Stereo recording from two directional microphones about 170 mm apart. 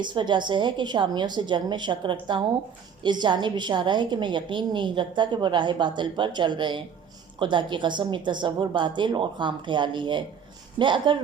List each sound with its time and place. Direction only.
0.0 s a woman's voice: 25° right (ahead or behind)